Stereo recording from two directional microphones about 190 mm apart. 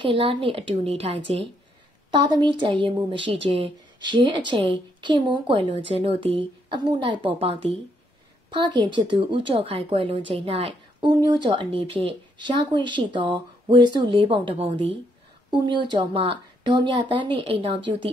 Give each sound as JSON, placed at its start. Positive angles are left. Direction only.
{"t": 0.0, "sound": "a woman's voice", "side_deg": -30}